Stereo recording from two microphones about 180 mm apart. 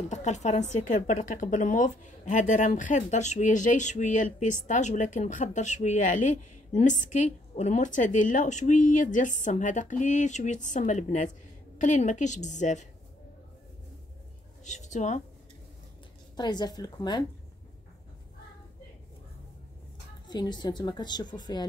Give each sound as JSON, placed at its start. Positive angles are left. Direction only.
{"t": 0.1, "sound": "a woman's voice", "side_deg": 40}
{"t": 14.6, "sound": "a woman's voice", "side_deg": 40}
{"t": 16.3, "sound": "a woman's voice", "side_deg": 20}
{"t": 20.2, "sound": "a woman's voice", "side_deg": 25}